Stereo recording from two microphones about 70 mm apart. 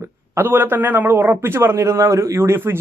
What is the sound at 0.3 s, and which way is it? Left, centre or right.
A man's voice, right.